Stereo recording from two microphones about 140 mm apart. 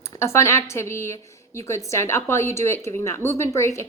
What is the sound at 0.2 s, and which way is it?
A woman's voice, 20° left (ahead or behind).